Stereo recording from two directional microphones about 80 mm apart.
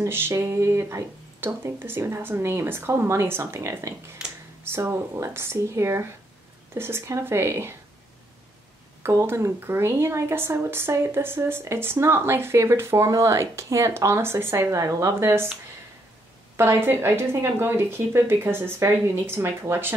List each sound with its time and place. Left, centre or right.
0.0 s speech: right
4.2 s a sound: centre
4.6 s speech: right
9.0 s speech: right
16.5 s speech: right